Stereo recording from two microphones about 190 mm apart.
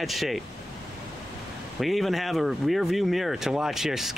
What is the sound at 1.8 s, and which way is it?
Speech, centre (ahead or behind).